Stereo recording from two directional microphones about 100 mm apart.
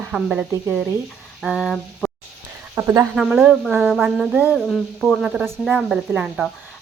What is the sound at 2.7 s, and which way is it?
Speech, 25° right (ahead or behind).